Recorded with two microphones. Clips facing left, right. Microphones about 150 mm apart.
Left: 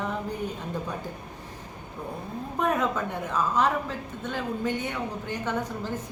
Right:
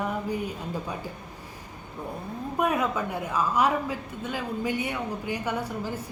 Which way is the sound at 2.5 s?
10° right (ahead or behind).